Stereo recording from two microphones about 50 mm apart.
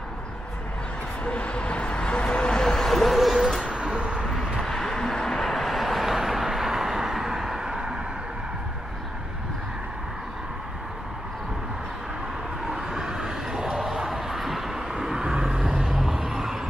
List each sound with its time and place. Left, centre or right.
1.2 s vehicle: left; by 3.6 s centre
3.6 s vehicle: centre
4.6 s vehicle: centre
12.6 s a sound: centre